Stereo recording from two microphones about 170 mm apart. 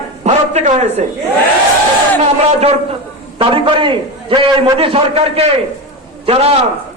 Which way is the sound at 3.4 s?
30° right (ahead or behind).